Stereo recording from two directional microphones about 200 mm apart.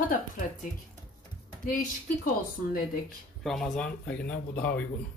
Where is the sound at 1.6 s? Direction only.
45° left (ahead or behind).